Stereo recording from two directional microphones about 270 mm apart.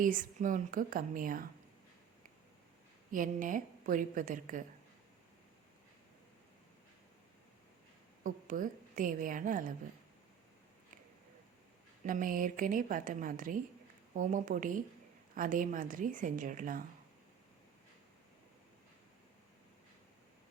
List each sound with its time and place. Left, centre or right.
0.0 s a woman's voice: right
3.1 s a woman's voice: right
8.2 s a woman's voice: right
12.0 s a woman's voice: right